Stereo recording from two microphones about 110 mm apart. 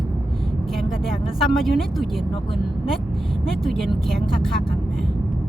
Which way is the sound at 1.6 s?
Centre (ahead or behind).